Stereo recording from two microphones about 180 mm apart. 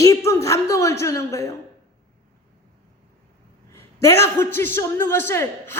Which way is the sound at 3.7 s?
15° left (ahead or behind).